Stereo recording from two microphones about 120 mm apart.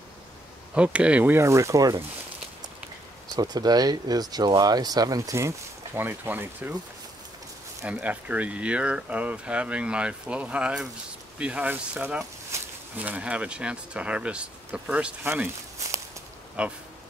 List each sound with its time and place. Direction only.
0.7 s speech: 10° right (ahead or behind); by 2.0 s 30° right (ahead or behind)
3.3 s speech: 35° right (ahead or behind)
5.9 s speech: 15° right (ahead or behind)
7.8 s speech: 10° right (ahead or behind)
16.6 s speech: 10° right (ahead or behind)